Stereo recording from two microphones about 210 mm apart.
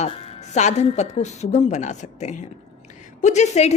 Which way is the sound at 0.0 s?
35° left (ahead or behind).